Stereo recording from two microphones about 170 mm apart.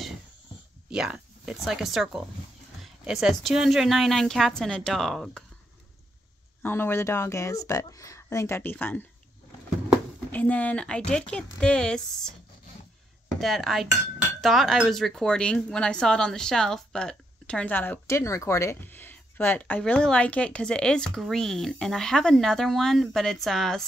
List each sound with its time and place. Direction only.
0.8 s speech: 5° right (ahead or behind)
6.6 s speech: 15° left (ahead or behind)
10.3 s speech: 10° left (ahead or behind)
13.4 s speech: centre (ahead or behind)